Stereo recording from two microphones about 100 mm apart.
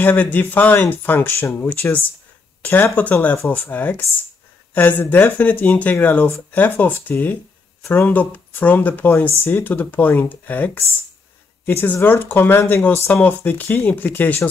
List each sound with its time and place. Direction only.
0.0 s speech: 20° left (ahead or behind)